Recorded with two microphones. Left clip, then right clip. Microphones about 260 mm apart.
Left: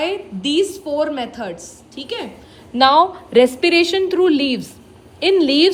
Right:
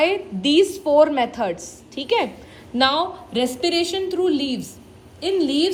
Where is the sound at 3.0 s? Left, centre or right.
Left.